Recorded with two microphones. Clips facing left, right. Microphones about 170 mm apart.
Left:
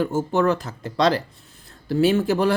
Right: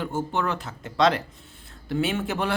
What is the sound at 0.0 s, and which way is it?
A man's voice, 40° left (ahead or behind).